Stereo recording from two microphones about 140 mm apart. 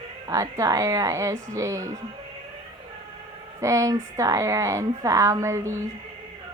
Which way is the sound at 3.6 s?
25° right (ahead or behind).